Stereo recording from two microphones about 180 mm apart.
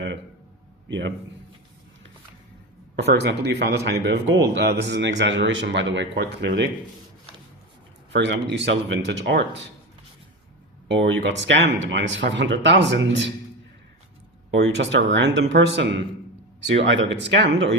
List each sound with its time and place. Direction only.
0.9 s a man's voice: 90° right
3.2 s a man's voice: 80° right
8.1 s speech: 80° right
10.8 s speech: 80° right
14.6 s speech: 90° right